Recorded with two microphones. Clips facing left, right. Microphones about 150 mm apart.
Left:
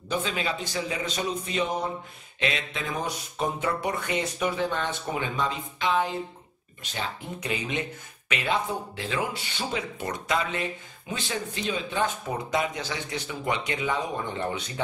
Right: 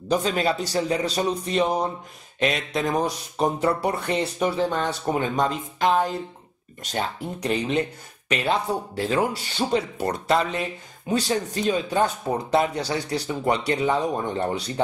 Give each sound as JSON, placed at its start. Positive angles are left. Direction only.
{"t": 0.1, "sound": "speech", "side_deg": -40}